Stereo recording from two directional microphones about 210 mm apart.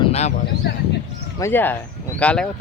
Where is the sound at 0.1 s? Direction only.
30° left (ahead or behind).